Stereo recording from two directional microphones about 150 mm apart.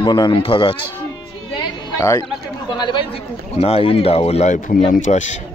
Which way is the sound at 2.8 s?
30° left (ahead or behind).